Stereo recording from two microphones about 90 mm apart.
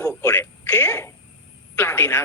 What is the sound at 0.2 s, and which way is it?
Telephone, 25° left (ahead or behind).